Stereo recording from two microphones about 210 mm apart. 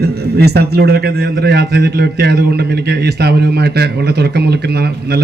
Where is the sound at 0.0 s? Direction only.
50° right (ahead or behind).